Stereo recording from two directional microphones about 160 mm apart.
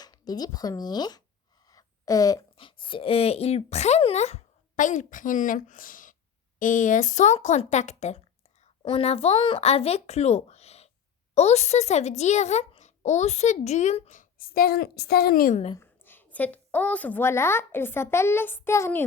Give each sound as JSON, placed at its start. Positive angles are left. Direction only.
{"t": 0.0, "sound": "a child's voice", "side_deg": 25}
{"t": 15.8, "sound": "a woman's voice", "side_deg": 10}